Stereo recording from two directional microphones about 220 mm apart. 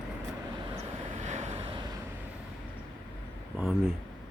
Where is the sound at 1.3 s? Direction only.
30° right (ahead or behind).